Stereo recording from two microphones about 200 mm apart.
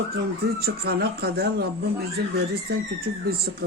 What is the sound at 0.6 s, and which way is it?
Speech, 50° right (ahead or behind).